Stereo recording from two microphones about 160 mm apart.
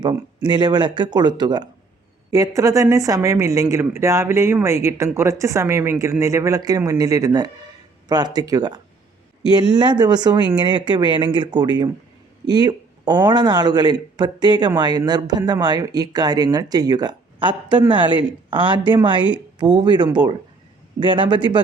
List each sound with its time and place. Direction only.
0.0 s a man's voice: 25° right (ahead or behind)